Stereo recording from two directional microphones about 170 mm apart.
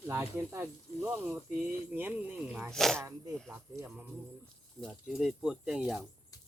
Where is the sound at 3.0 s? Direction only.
20° right (ahead or behind).